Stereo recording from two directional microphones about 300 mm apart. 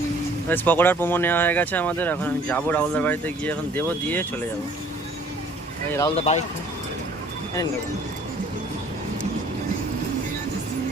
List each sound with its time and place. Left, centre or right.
0.4 s speech: centre
6.1 s speech: left